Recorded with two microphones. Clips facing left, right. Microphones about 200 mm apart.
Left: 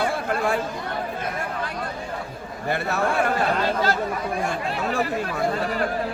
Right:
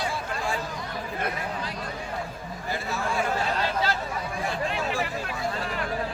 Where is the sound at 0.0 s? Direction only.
60° left (ahead or behind).